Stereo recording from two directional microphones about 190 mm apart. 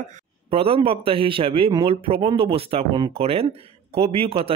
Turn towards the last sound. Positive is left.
turn(degrees=-30)  # may be behind; listen again after turning